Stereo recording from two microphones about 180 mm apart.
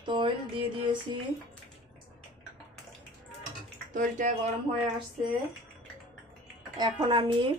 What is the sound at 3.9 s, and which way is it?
Speech, 45° right (ahead or behind).